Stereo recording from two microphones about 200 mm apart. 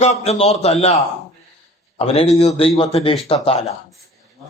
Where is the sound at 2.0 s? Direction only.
30° left (ahead or behind).